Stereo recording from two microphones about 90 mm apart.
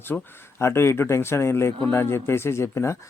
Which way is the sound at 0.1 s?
20° left (ahead or behind).